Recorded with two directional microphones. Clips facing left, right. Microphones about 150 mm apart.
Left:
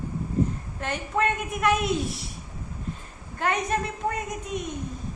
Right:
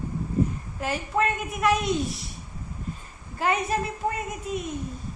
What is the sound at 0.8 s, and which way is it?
A woman's voice, 5° right (ahead or behind).